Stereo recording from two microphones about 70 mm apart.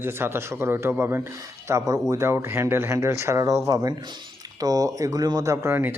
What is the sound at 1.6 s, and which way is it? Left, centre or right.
Speech, right.